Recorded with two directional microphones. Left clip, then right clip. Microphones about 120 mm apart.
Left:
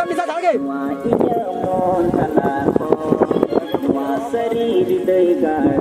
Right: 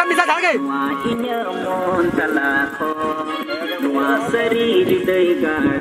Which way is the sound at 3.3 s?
40° right (ahead or behind).